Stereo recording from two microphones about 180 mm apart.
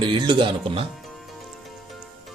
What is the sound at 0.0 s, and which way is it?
Speech, 25° right (ahead or behind).